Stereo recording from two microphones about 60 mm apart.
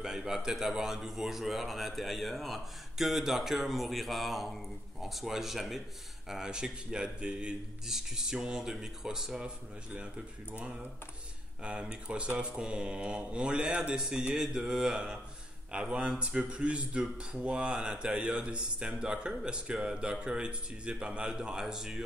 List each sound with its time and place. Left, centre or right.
0.0 s a man's voice: centre
11.6 s speech: centre